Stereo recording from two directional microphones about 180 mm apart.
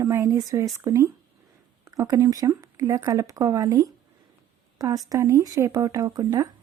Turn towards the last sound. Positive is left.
turn(degrees=-20)  # may be behind; listen again after turning